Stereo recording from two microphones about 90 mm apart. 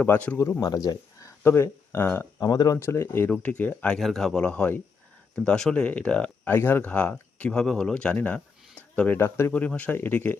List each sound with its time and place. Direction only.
0.0 s speech: 15° left (ahead or behind)
0.6 s speech: 45° left (ahead or behind)
1.5 s speech: 25° left (ahead or behind)
2.4 s speech: 45° left (ahead or behind)
2.7 s speech: 30° left (ahead or behind)
3.4 s speech: 15° left (ahead or behind)
3.9 s speech: 5° left (ahead or behind)
6.5 s speech: 25° left (ahead or behind)
9.1 s speech: 30° left (ahead or behind)
9.5 s speech: 15° left (ahead or behind)